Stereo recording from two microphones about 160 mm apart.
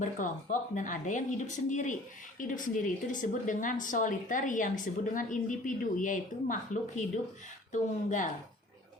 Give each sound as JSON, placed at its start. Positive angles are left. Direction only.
{"t": 0.8, "sound": "speech", "side_deg": 50}